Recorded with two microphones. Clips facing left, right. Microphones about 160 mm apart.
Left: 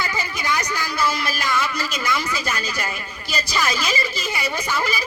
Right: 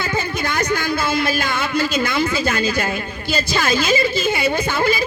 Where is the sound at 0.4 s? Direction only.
55° right (ahead or behind).